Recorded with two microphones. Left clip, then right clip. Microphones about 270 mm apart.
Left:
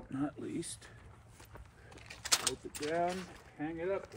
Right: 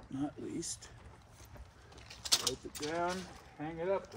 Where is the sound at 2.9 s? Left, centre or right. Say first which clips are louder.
Left 2 dB; right.